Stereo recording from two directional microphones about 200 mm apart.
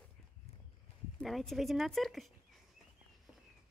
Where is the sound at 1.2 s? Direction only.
Centre (ahead or behind).